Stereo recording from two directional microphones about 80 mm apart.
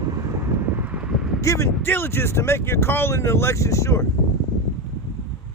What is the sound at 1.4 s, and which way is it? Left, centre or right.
Speech, left.